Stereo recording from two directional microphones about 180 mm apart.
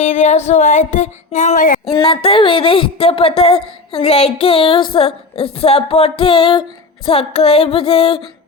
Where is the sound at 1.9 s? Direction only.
25° left (ahead or behind).